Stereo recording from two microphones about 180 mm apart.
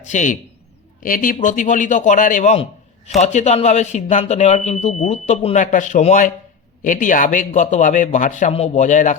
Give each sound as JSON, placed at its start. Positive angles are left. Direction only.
{"t": 0.0, "sound": "a man's voice", "side_deg": 40}